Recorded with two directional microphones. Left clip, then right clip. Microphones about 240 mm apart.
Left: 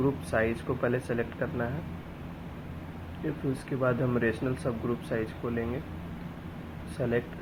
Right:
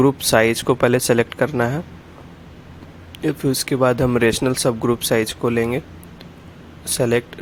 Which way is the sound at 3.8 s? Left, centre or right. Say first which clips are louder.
Right 11 dB; right.